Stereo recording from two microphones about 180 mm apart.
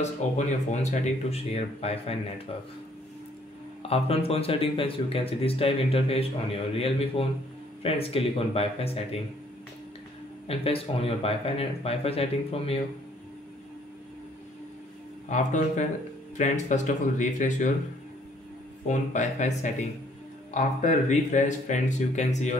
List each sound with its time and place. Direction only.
0.0 s speech: 40° left (ahead or behind)
3.8 s speech: 35° left (ahead or behind)
10.4 s speech: 30° left (ahead or behind)
15.2 s speech: 40° left (ahead or behind)
18.9 s speech: 40° left (ahead or behind)